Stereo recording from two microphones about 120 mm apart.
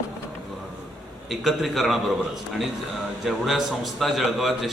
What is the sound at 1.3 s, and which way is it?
Speech, centre (ahead or behind).